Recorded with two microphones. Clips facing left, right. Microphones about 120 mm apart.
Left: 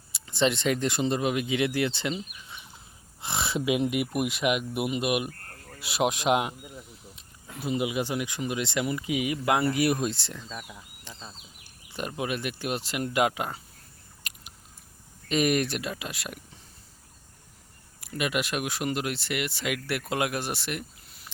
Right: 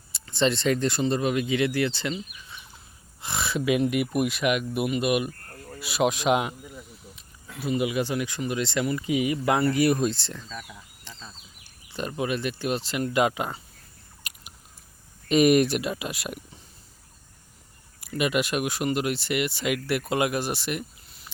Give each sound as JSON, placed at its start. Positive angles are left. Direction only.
{"t": 0.1, "sound": "speech", "side_deg": 10}
{"t": 14.2, "sound": "a sound", "side_deg": -5}
{"t": 15.3, "sound": "speech", "side_deg": -15}
{"t": 18.1, "sound": "speech", "side_deg": 0}